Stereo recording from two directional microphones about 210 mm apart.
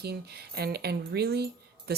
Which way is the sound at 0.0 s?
50° right (ahead or behind).